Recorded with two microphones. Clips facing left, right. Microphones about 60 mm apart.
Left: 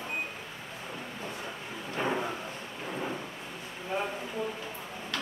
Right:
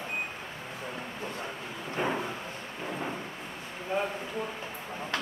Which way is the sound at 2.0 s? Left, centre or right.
Centre.